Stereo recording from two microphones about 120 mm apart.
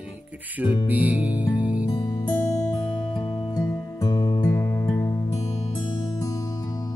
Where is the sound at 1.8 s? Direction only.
35° left (ahead or behind).